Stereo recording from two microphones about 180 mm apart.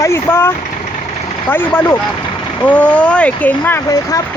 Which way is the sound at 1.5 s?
10° left (ahead or behind).